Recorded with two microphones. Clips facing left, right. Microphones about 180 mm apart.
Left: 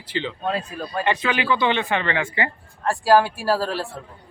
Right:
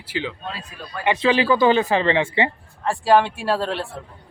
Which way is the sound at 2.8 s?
Centre (ahead or behind).